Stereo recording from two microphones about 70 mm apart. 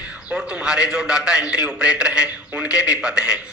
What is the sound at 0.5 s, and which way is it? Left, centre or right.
A man's voice, centre.